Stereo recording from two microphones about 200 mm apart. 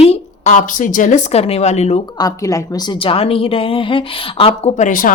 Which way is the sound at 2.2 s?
15° left (ahead or behind).